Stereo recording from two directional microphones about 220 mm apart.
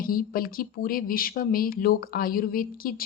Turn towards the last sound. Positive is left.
turn(degrees=40)  # may be behind; listen again after turning